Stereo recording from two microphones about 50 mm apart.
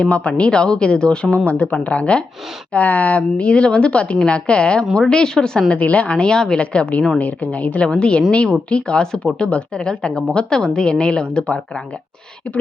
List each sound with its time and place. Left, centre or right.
0.0 s a woman's voice: left
5.7 s a woman's voice: left